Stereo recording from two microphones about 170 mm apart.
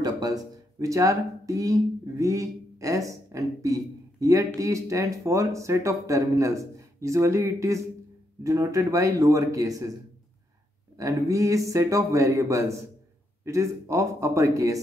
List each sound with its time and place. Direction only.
0.0 s speech: 20° right (ahead or behind)
11.0 s speech: 20° right (ahead or behind)